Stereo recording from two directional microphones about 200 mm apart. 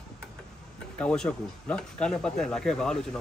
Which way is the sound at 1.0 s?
5° left (ahead or behind).